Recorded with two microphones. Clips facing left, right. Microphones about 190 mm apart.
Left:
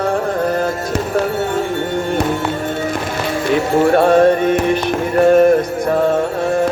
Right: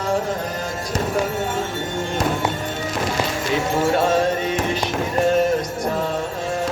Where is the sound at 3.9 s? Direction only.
55° left (ahead or behind).